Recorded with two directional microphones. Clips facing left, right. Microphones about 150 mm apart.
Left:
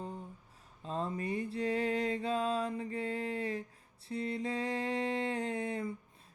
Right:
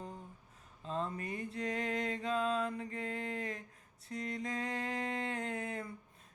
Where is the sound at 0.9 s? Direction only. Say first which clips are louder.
Left 1 dB; 35° left (ahead or behind).